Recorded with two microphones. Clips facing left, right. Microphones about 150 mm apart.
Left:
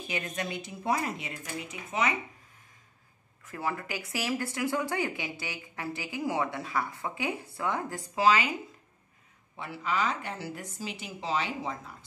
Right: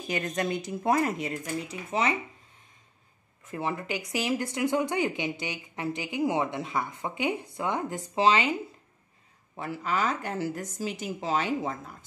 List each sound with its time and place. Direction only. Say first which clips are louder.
0.1 s speech: right 6 dB; 45° right (ahead or behind)
3.4 s speech: right 2 dB; 20° right (ahead or behind)
9.6 s speech: right 2 dB; 45° right (ahead or behind)